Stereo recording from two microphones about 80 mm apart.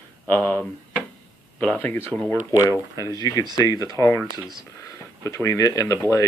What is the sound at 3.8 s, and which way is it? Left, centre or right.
Speech, right.